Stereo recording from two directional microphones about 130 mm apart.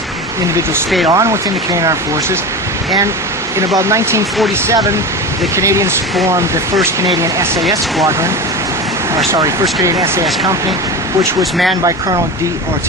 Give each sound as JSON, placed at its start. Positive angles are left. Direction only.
{"t": 1.1, "sound": "speech", "side_deg": -25}
{"t": 3.5, "sound": "speech", "side_deg": -20}
{"t": 5.6, "sound": "speech", "side_deg": -25}
{"t": 7.7, "sound": "speech", "side_deg": -25}
{"t": 9.3, "sound": "speech", "side_deg": -25}